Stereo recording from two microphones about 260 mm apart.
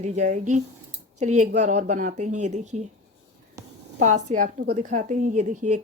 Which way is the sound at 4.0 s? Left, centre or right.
Right.